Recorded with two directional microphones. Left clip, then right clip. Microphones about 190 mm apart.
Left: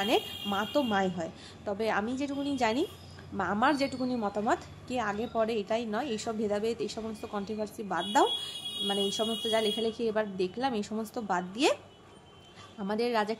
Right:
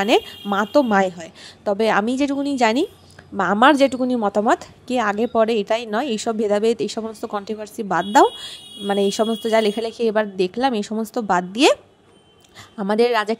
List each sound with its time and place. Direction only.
0.0 s a woman's voice: 40° right (ahead or behind)